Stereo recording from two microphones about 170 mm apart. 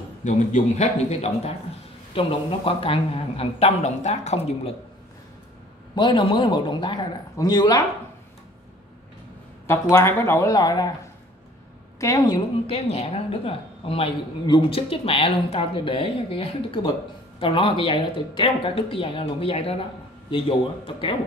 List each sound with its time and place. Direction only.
0.2 s speech: 45° left (ahead or behind)
5.9 s a man's voice: 30° left (ahead or behind)
9.7 s speech: 15° left (ahead or behind)
12.0 s a man's voice: 20° left (ahead or behind)
12.6 s speech: 40° left (ahead or behind)